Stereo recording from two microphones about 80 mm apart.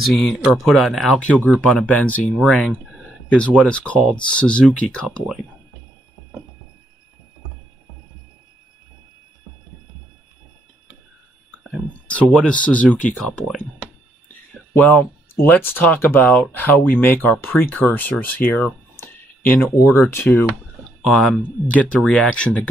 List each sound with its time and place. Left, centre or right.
0.0 s speech: centre
1.2 s speech: centre
2.4 s speech: centre
12.1 s speech: centre
15.3 s speech: left
21.1 s speech: centre